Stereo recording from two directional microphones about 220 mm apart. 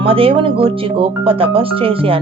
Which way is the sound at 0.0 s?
25° right (ahead or behind).